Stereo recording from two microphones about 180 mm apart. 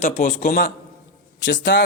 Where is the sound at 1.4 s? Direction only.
75° left (ahead or behind).